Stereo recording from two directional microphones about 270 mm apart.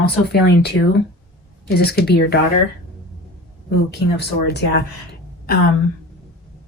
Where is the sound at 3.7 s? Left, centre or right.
Left.